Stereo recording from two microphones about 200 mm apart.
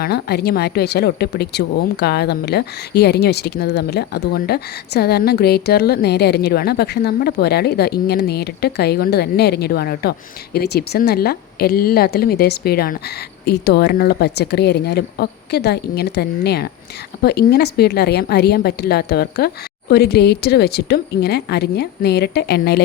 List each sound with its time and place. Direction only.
0.0 s a woman's voice: 50° left (ahead or behind)